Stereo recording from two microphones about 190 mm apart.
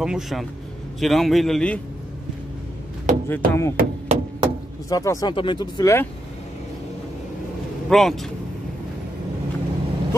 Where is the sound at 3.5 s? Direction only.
15° left (ahead or behind).